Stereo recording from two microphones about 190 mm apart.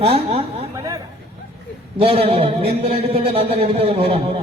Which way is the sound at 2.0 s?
30° right (ahead or behind).